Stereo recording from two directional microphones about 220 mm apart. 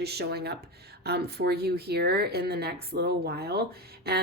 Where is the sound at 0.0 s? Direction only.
45° right (ahead or behind).